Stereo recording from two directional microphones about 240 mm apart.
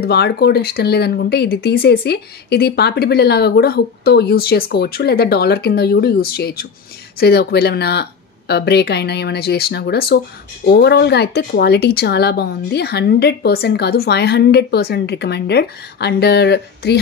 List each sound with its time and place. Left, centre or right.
0.0 s speech: left